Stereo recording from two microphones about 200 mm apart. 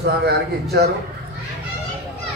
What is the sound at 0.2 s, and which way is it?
Speech, 50° right (ahead or behind).